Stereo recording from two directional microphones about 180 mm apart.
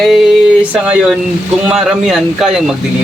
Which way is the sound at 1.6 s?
5° right (ahead or behind).